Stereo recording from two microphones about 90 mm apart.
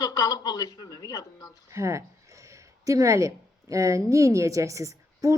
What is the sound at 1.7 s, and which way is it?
Speech, 35° right (ahead or behind).